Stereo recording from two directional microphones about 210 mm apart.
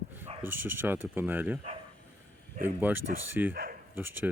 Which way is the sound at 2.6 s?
10° right (ahead or behind).